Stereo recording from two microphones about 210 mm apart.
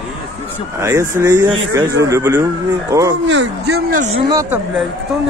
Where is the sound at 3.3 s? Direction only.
60° right (ahead or behind).